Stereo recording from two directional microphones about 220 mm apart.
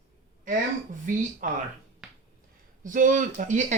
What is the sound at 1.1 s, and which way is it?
Speech, 35° right (ahead or behind).